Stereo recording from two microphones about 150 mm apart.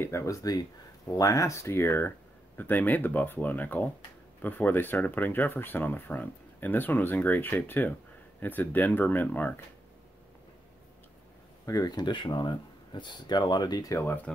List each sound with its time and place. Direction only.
0.0 s speech: 20° left (ahead or behind)
11.6 s speech: 25° left (ahead or behind)